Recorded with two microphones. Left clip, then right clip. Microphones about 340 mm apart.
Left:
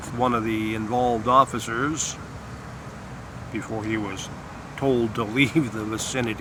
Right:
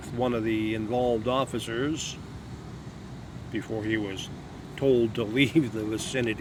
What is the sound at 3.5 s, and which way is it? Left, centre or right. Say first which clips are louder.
Speech: left 1 dB; right.